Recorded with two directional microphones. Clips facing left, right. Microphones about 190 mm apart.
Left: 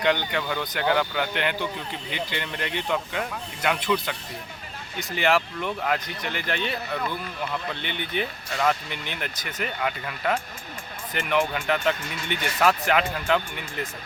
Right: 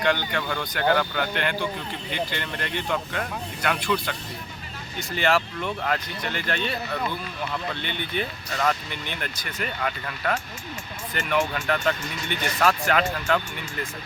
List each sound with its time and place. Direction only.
0.0 s speech: 15° left (ahead or behind)
7.8 s speech: 15° left (ahead or behind)